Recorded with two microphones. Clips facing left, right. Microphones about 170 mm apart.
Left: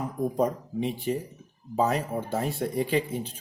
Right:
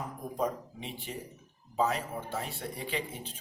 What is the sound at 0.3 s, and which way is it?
A man's voice, 40° left (ahead or behind).